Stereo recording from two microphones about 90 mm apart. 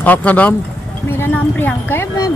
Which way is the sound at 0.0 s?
15° left (ahead or behind).